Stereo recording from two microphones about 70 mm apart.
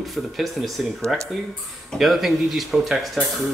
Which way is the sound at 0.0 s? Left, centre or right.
Centre.